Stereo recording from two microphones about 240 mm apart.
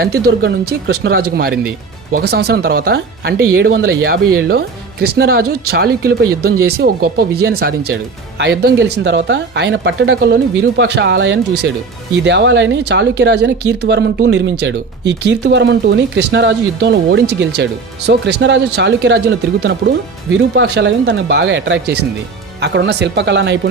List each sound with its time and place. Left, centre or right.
0.0 s speech: right